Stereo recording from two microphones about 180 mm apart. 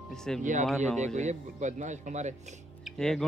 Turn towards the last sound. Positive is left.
turn(degrees=5)  # may be behind; listen again after turning